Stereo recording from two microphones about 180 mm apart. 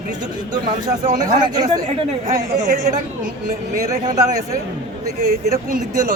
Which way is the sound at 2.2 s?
50° right (ahead or behind).